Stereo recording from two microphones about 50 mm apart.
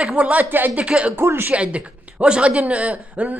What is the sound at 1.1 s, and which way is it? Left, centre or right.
Speech, right.